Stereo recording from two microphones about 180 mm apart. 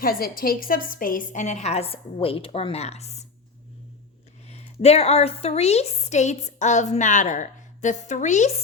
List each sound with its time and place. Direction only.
0.0 s a woman's voice: 55° left (ahead or behind); by 3.2 s 35° left (ahead or behind)
4.4 s a woman's voice: 35° left (ahead or behind)